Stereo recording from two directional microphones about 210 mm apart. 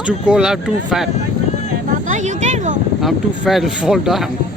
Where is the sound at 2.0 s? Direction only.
35° right (ahead or behind).